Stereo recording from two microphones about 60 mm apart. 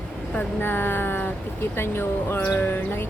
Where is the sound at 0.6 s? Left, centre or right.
Left.